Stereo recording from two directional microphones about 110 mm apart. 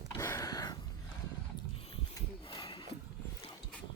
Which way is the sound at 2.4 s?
45° left (ahead or behind).